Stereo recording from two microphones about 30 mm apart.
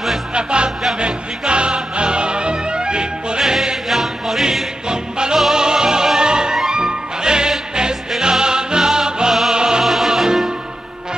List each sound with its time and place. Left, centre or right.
0.3 s music: right
3.3 s music: centre
4.8 s music: right